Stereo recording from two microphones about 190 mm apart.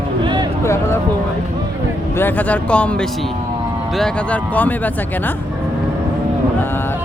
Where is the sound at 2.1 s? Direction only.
10° left (ahead or behind).